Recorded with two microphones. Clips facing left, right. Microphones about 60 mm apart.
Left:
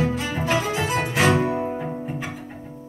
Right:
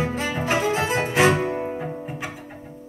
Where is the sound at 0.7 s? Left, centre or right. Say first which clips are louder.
Right 1 dB; right.